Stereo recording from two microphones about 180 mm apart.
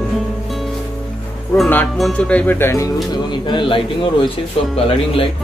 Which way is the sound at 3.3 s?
25° left (ahead or behind).